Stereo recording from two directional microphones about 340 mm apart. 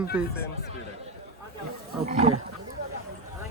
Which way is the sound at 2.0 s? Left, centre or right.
Centre.